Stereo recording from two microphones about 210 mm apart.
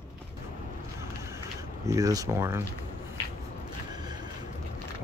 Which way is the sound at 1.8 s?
15° right (ahead or behind).